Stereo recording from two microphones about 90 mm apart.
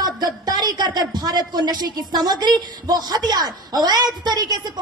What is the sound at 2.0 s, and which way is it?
Speech, 50° right (ahead or behind).